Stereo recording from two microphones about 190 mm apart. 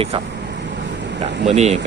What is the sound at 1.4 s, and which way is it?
Speech, 35° right (ahead or behind).